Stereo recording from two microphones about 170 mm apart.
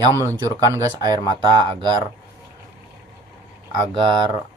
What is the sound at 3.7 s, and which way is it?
Speech, 25° right (ahead or behind).